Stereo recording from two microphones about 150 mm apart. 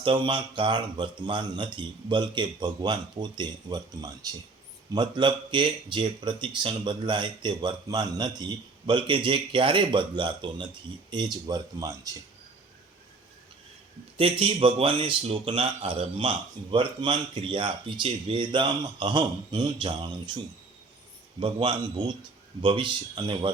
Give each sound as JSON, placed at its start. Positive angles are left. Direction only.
{"t": 0.0, "sound": "speech", "side_deg": -35}
{"t": 14.2, "sound": "speech", "side_deg": -40}
{"t": 21.4, "sound": "speech", "side_deg": -35}